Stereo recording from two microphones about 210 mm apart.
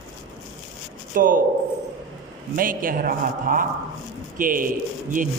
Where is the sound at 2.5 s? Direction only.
40° right (ahead or behind).